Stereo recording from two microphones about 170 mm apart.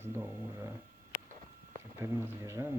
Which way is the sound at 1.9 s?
15° right (ahead or behind).